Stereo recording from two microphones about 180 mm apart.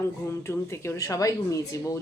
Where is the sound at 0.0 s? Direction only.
15° left (ahead or behind).